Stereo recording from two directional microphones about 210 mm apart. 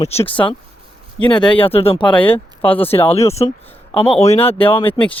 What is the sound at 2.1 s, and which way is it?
Speech, 10° left (ahead or behind).